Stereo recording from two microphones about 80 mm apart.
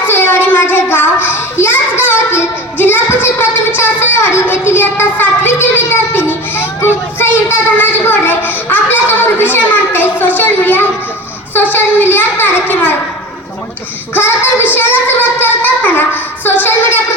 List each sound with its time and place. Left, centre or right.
0.0 s child singing: left
3.8 s a sound: left
14.1 s child singing: left